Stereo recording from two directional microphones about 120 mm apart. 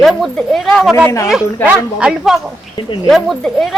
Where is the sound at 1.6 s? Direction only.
5° right (ahead or behind).